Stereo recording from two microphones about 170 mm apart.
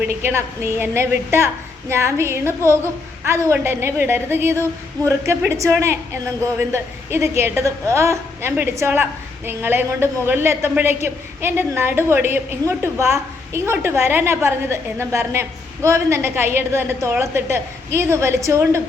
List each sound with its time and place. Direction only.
0.0 s a woman's voice: 15° right (ahead or behind)